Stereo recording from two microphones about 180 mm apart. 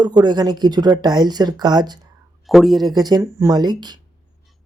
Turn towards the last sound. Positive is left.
turn(degrees=-25)  # may be behind; listen again after turning